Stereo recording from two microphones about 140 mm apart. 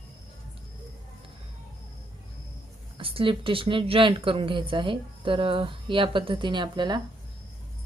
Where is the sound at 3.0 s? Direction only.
40° right (ahead or behind).